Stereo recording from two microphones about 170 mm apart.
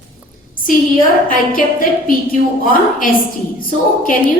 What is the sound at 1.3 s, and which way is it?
Speech, 55° left (ahead or behind).